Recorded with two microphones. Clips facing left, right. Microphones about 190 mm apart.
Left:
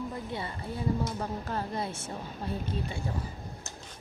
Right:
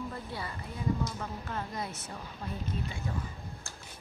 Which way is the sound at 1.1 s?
35° left (ahead or behind).